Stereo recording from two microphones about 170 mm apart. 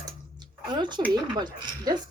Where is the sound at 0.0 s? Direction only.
25° right (ahead or behind).